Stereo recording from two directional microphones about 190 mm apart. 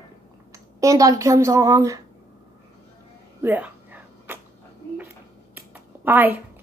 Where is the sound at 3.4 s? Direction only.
10° right (ahead or behind).